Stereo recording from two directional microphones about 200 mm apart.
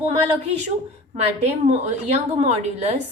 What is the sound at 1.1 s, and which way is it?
A woman's voice, 35° right (ahead or behind).